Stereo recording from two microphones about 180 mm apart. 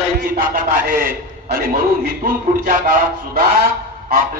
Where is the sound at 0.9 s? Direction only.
50° right (ahead or behind).